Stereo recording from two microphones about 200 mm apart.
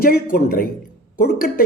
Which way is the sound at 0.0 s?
45° left (ahead or behind).